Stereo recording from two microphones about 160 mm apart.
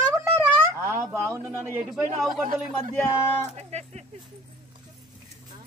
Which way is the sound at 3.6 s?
45° right (ahead or behind).